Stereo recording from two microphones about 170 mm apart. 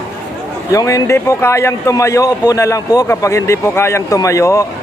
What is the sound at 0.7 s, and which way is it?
Speech, 20° left (ahead or behind).